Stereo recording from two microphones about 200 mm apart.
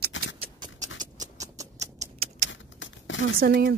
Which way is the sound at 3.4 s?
50° right (ahead or behind).